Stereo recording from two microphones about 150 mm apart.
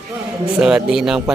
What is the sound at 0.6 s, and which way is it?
Speech, 5° right (ahead or behind).